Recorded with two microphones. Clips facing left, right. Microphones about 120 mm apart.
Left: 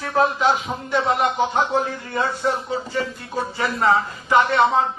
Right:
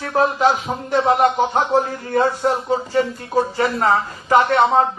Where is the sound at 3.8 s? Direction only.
40° right (ahead or behind).